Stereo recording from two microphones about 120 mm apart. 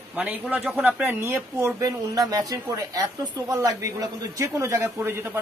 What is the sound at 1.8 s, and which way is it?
Speech, 30° right (ahead or behind).